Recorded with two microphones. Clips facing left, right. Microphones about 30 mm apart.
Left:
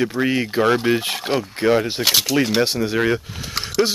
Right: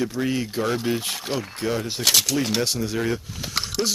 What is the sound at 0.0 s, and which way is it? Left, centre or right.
Speech, left.